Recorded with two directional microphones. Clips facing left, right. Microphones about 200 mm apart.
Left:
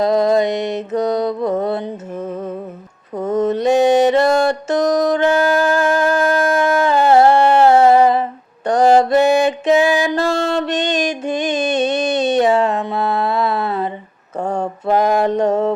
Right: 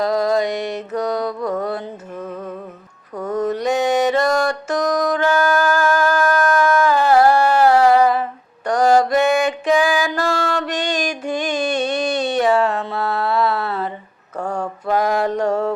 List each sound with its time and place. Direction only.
0.0 s mantra: 25° left (ahead or behind)